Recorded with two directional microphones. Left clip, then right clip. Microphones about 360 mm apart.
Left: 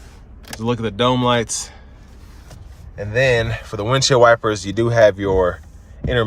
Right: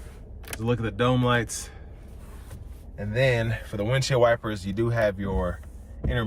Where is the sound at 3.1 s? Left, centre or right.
Centre.